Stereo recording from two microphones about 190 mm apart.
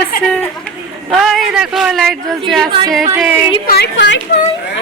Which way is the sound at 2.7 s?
25° right (ahead or behind).